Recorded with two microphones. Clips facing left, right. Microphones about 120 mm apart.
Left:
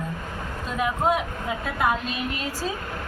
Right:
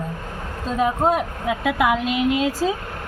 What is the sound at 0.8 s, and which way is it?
Speech, 30° right (ahead or behind).